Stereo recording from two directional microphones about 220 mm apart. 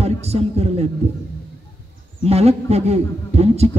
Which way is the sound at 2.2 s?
30° right (ahead or behind).